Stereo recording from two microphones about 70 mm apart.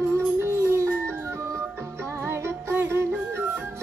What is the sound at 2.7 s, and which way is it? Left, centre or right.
Music, right.